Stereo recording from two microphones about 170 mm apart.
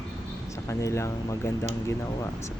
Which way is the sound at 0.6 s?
15° left (ahead or behind).